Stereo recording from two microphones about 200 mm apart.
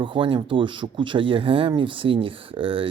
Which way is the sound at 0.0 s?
25° right (ahead or behind).